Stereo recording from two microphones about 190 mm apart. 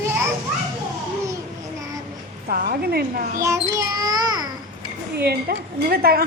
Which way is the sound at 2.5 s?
50° right (ahead or behind).